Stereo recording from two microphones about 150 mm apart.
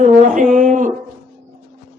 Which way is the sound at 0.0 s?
60° right (ahead or behind).